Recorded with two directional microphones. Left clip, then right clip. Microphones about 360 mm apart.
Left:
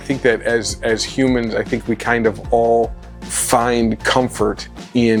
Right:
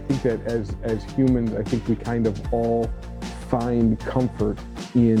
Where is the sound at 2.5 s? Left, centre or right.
Left.